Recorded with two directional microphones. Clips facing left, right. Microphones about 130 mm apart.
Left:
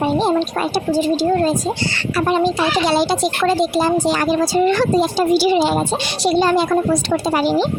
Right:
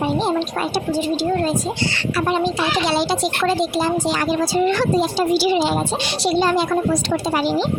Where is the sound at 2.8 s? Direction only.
45° left (ahead or behind).